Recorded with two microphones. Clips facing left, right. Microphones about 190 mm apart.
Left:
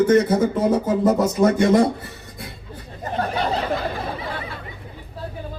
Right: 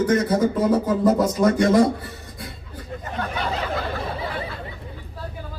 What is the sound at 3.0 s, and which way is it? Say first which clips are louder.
Chatter: left 5 dB; 40° left (ahead or behind).